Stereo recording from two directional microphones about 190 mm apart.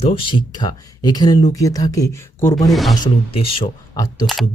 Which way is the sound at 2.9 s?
25° left (ahead or behind).